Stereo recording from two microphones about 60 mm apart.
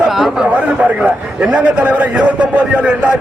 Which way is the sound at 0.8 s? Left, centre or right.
Centre.